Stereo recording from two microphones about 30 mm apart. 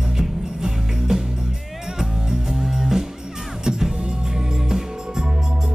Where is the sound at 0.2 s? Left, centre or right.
Centre.